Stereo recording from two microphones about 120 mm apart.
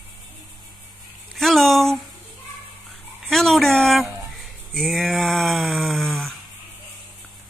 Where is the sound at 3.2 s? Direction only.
5° left (ahead or behind).